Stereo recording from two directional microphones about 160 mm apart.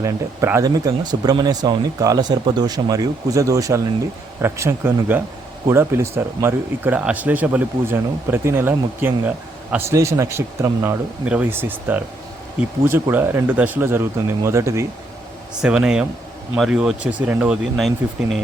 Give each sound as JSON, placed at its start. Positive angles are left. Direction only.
{"t": 0.0, "sound": "speech", "side_deg": -15}
{"t": 15.6, "sound": "speech", "side_deg": -5}